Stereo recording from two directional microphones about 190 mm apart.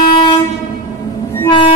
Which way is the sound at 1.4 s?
25° left (ahead or behind).